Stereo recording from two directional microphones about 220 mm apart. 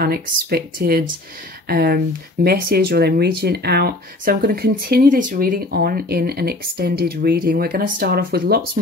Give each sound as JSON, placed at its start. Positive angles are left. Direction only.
{"t": 0.0, "sound": "speech", "side_deg": -45}